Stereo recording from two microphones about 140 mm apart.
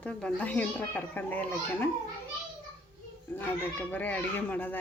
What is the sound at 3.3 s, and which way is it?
A woman's voice, 10° left (ahead or behind).